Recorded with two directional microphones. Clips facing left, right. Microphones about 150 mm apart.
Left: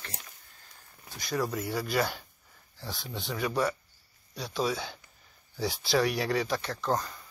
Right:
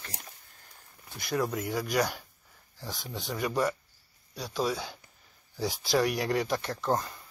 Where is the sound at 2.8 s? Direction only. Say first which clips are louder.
Even; 15° right (ahead or behind).